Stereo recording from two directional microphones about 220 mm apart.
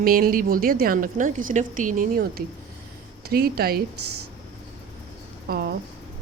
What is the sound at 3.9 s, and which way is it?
Speech, 90° right.